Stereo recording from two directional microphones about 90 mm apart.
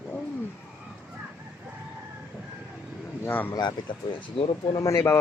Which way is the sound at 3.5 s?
55° left (ahead or behind).